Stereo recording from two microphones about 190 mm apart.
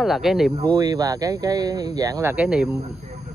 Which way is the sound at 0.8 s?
20° right (ahead or behind).